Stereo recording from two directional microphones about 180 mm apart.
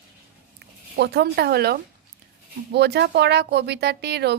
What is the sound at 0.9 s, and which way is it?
Speech, 65° right (ahead or behind).